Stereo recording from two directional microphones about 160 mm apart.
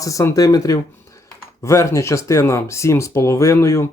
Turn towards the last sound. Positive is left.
turn(degrees=15)  # may be behind; listen again after turning